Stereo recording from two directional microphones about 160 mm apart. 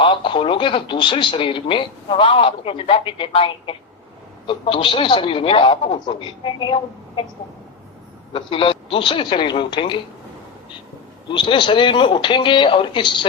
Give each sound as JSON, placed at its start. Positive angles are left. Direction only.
{"t": 0.0, "sound": "speech", "side_deg": 30}
{"t": 8.3, "sound": "speech", "side_deg": 30}
{"t": 11.3, "sound": "speech", "side_deg": 30}